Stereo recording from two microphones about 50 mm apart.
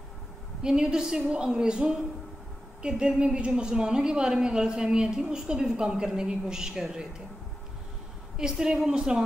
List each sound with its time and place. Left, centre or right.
0.6 s a woman's voice: centre
8.4 s a woman's voice: centre